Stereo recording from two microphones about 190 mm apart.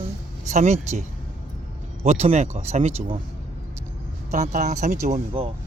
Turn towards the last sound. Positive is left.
turn(degrees=-30)  # may be behind; listen again after turning